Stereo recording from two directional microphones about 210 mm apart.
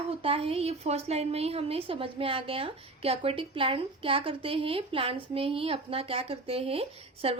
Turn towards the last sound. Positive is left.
turn(degrees=-25)  # may be behind; listen again after turning